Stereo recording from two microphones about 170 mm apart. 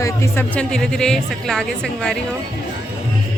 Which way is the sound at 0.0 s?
15° left (ahead or behind).